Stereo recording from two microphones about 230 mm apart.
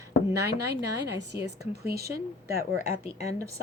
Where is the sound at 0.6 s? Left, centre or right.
Right.